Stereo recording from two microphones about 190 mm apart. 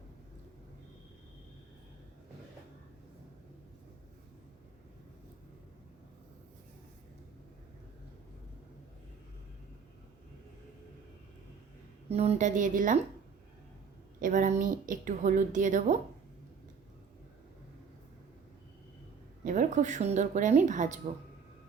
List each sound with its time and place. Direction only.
12.0 s speech: 35° right (ahead or behind)
14.2 s a woman's voice: 45° right (ahead or behind)
19.5 s speech: 40° right (ahead or behind)